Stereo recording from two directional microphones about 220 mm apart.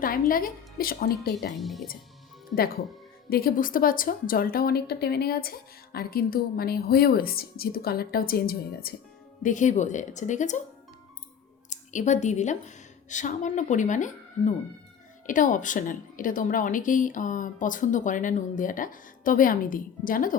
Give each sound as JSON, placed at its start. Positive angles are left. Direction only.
{"t": 0.0, "sound": "a woman's voice", "side_deg": 40}
{"t": 1.5, "sound": "speech", "side_deg": 0}
{"t": 3.2, "sound": "a woman's voice", "side_deg": 45}
{"t": 11.7, "sound": "a woman's voice", "side_deg": 35}